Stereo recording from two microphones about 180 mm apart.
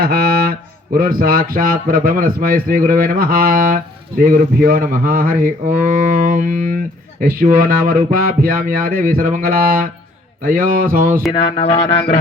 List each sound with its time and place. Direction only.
0.0 s a sound: 55° right (ahead or behind)
0.9 s a man's voice: 55° right (ahead or behind)
11.3 s speech: 35° left (ahead or behind)